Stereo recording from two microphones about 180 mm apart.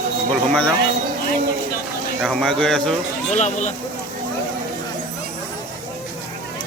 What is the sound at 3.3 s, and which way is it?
Speech, 40° left (ahead or behind).